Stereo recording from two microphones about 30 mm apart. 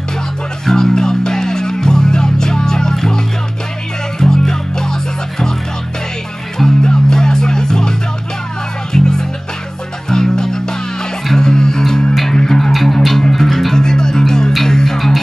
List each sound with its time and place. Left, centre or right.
0.7 s music: centre
4.2 s music: left
6.8 s music: left
8.9 s music: centre
12.7 s music: centre
13.7 s music: left